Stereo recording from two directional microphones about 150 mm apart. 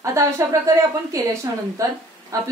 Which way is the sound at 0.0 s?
20° right (ahead or behind).